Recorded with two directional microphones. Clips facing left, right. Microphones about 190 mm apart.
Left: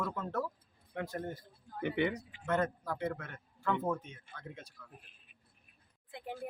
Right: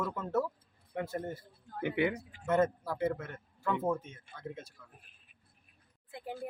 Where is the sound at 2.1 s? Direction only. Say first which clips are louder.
Right 1 dB; 45° right (ahead or behind).